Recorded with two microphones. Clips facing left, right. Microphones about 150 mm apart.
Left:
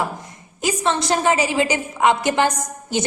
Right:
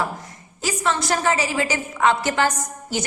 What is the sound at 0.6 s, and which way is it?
A woman's voice, 20° left (ahead or behind).